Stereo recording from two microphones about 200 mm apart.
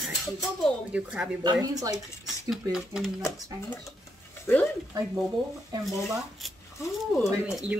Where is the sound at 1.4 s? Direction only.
20° right (ahead or behind).